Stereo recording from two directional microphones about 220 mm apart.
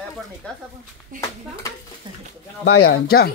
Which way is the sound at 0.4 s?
5° left (ahead or behind).